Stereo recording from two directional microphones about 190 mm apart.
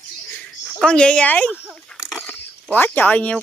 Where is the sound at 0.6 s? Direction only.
Centre (ahead or behind).